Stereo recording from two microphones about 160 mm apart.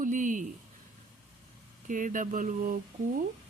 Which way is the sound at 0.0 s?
55° right (ahead or behind).